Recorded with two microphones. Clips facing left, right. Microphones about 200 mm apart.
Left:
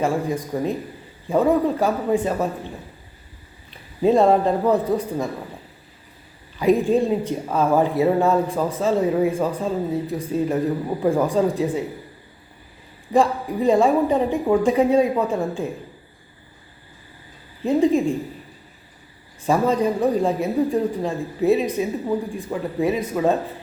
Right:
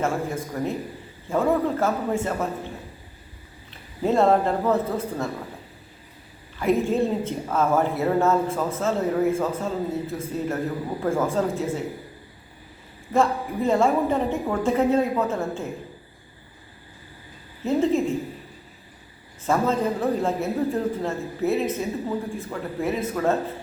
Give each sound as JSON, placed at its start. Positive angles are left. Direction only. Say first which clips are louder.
{"t": 0.0, "sound": "speech", "louder": "left 4 dB", "side_deg": 15}
{"t": 4.0, "sound": "speech", "louder": "left 3 dB", "side_deg": 15}
{"t": 6.6, "sound": "speech", "louder": "left 4 dB", "side_deg": 15}
{"t": 13.1, "sound": "speech", "louder": "left 3 dB", "side_deg": 15}
{"t": 17.7, "sound": "speech", "louder": "left 4 dB", "side_deg": 15}
{"t": 19.5, "sound": "speech", "louder": "left 3 dB", "side_deg": 15}